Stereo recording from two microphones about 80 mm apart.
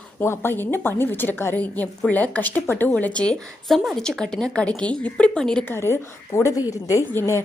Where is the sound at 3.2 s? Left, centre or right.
Centre.